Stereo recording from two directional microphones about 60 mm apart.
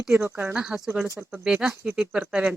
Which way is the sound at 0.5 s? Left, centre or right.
Centre.